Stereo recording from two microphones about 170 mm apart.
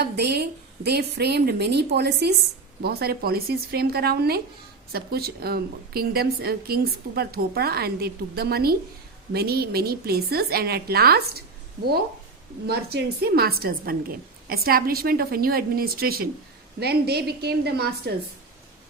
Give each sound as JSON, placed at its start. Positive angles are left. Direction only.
{"t": 0.0, "sound": "speech", "side_deg": -70}
{"t": 2.8, "sound": "a woman's voice", "side_deg": -65}
{"t": 12.6, "sound": "a woman's voice", "side_deg": -70}